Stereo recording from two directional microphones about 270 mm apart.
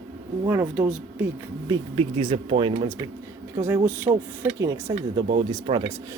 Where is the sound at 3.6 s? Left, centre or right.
Centre.